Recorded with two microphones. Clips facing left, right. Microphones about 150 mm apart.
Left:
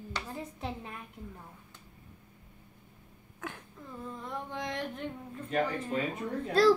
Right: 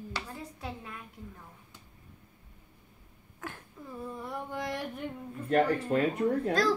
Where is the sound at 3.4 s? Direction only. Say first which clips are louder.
Even; centre (ahead or behind).